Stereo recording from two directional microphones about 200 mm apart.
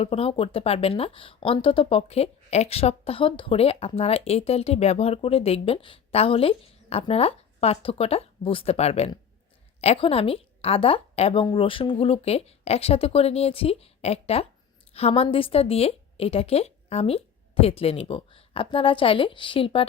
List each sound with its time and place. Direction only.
0.0 s speech: 30° left (ahead or behind)